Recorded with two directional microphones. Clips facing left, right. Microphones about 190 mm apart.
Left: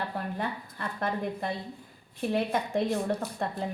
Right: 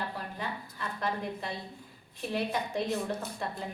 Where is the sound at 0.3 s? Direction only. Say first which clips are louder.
Left 4 dB; 55° left (ahead or behind).